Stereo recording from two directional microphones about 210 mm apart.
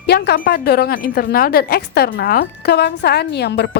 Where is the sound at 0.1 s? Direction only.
45° left (ahead or behind).